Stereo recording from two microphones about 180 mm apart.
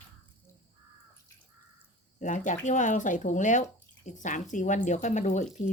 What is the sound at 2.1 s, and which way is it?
Speech, 45° left (ahead or behind).